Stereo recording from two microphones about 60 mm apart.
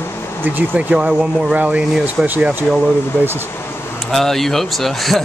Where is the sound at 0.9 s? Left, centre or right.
Centre.